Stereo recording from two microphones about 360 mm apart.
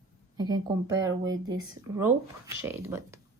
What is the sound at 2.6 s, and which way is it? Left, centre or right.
Speech, centre.